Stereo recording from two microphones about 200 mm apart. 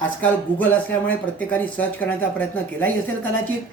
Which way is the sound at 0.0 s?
10° left (ahead or behind).